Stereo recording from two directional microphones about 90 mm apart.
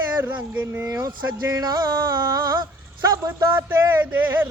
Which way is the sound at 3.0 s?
45° right (ahead or behind).